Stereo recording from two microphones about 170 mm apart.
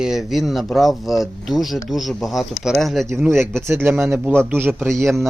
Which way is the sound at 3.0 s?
15° right (ahead or behind).